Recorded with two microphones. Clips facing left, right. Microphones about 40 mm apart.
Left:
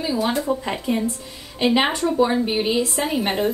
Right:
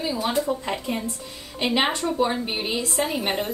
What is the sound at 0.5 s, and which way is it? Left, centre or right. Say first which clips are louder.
Speech: left 3 dB; centre.